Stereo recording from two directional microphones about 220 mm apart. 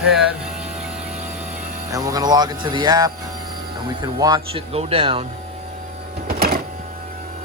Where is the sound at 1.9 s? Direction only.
15° right (ahead or behind).